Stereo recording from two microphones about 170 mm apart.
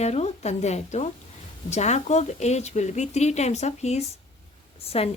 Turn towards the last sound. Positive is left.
turn(degrees=35)  # may be behind; listen again after turning